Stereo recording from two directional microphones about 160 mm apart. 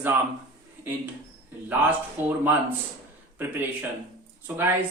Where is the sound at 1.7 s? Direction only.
10° right (ahead or behind).